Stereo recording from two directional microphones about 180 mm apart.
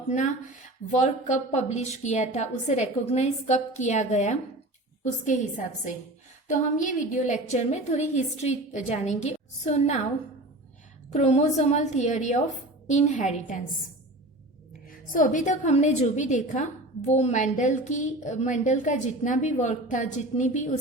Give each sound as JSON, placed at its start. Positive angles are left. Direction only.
{"t": 0.9, "sound": "a woman's voice", "side_deg": 40}
{"t": 11.1, "sound": "a woman's voice", "side_deg": 40}
{"t": 14.8, "sound": "a woman's voice", "side_deg": 50}